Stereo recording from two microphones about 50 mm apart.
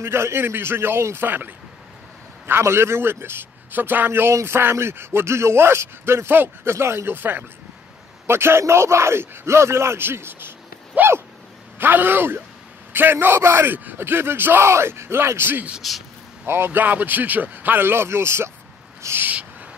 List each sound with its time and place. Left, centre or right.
0.0 s a man's voice: right
2.4 s a man's voice: right
4.3 s speech: right
6.7 s speech: right
7.2 s a man's voice: right
8.3 s speech: right
10.0 s a man's voice: right
11.0 s dog: right
11.8 s a man's voice: right
14.6 s speech: right
15.8 s speech: centre
16.4 s a man's voice: right
16.8 s speech: right
19.0 s owl: right